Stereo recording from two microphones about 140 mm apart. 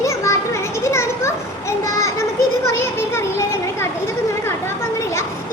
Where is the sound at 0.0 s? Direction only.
20° left (ahead or behind).